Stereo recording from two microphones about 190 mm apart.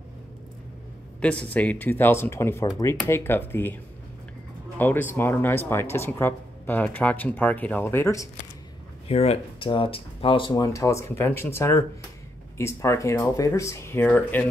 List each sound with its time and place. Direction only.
1.2 s speech: 5° left (ahead or behind)
4.7 s speech: 10° left (ahead or behind)
9.0 s speech: 35° left (ahead or behind); by 14.4 s 10° left (ahead or behind)